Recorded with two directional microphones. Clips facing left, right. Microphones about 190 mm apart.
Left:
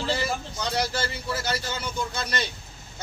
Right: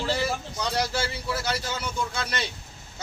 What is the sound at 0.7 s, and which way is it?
Speech, 5° right (ahead or behind).